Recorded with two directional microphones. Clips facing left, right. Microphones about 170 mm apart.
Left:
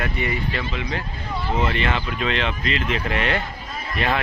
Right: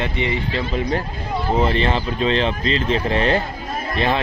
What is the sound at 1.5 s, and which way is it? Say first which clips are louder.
Speech: right 4 dB; 35° right (ahead or behind).